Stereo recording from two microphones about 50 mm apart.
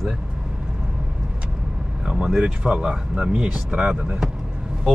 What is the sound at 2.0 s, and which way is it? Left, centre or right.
Speech, centre.